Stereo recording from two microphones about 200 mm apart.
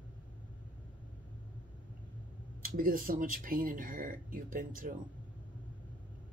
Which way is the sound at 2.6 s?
45° right (ahead or behind).